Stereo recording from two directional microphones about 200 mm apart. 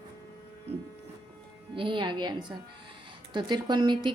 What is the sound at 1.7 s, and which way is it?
A woman's voice, 25° right (ahead or behind).